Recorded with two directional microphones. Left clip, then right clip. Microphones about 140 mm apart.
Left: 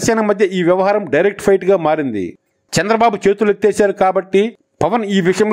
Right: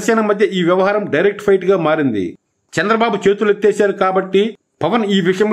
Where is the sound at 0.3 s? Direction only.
40° left (ahead or behind).